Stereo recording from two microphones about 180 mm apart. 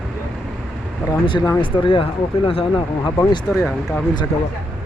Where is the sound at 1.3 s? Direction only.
25° left (ahead or behind).